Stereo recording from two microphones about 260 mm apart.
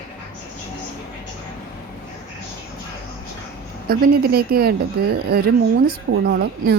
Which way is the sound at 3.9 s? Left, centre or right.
Right.